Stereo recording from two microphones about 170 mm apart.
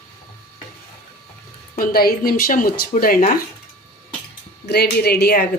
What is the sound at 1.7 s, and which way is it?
Speech, 60° left (ahead or behind).